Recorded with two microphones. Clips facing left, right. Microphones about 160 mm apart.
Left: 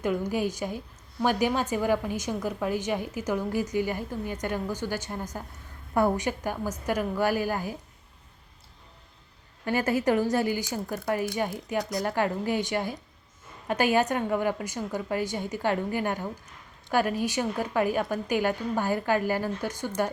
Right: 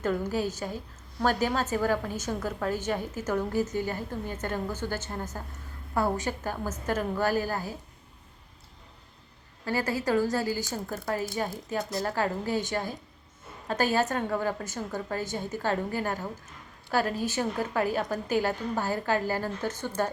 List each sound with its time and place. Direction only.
0.0 s a woman's voice: 15° left (ahead or behind)
9.6 s a woman's voice: 20° left (ahead or behind)